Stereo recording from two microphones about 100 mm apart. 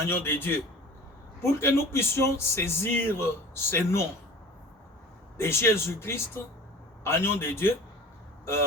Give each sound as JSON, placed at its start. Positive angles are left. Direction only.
{"t": 0.1, "sound": "speech", "side_deg": 20}
{"t": 5.4, "sound": "speech", "side_deg": 25}